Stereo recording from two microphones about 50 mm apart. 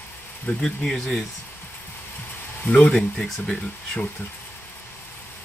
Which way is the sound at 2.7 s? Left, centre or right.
Left.